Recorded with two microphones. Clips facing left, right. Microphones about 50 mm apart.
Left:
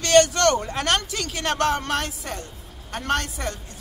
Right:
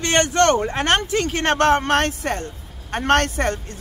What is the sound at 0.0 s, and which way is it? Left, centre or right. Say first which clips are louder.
Speech: even; right.